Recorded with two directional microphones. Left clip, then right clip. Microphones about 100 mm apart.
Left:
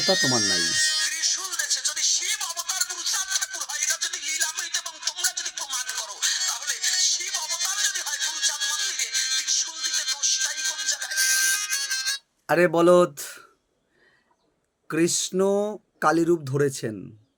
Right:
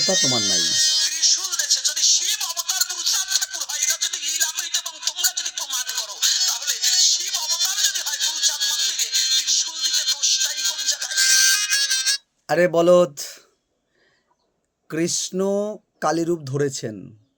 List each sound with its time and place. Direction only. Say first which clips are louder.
0.6 s music: right 4 dB; 20° right (ahead or behind); by 12.2 s 40° right (ahead or behind)
12.5 s speech: right 2 dB; 35° left (ahead or behind)
14.8 s speech: even; 30° left (ahead or behind)